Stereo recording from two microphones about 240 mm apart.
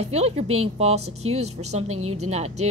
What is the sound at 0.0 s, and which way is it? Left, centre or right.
A woman's voice, right.